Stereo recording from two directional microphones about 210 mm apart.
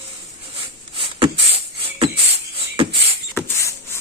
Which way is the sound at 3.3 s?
15° left (ahead or behind).